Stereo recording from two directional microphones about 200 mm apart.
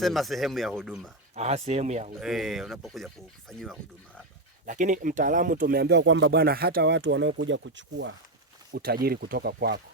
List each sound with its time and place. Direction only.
0.0 s speech: centre (ahead or behind)
1.4 s speech: 35° right (ahead or behind)
2.2 s speech: centre (ahead or behind)
4.6 s speech: 40° right (ahead or behind); by 8.1 s 65° right (ahead or behind)
8.7 s speech: 50° right (ahead or behind)